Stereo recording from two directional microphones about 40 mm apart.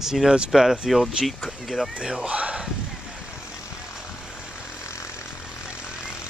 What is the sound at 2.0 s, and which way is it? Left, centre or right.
Speech, centre.